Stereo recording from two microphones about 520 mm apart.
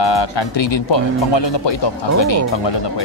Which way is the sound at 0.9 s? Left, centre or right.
Left.